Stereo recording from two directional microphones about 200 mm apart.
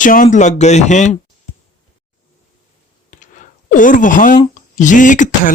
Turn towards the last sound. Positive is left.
turn(degrees=40)  # may be behind; listen again after turning